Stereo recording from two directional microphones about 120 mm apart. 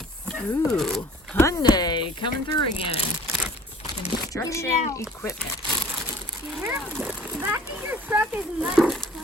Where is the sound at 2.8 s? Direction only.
50° left (ahead or behind).